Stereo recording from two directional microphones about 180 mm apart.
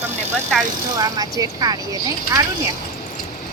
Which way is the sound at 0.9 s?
20° right (ahead or behind).